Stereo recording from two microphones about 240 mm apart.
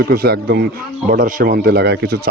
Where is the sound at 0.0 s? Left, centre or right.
Right.